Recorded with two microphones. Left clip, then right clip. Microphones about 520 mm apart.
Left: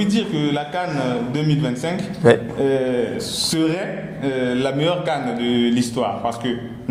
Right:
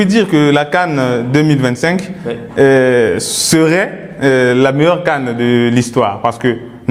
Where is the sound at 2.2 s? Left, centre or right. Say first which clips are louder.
Left 10 dB; left.